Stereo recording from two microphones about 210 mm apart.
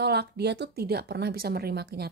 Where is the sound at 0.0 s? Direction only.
50° right (ahead or behind).